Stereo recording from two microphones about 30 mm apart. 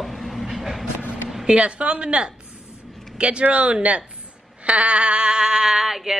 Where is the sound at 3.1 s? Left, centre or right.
Right.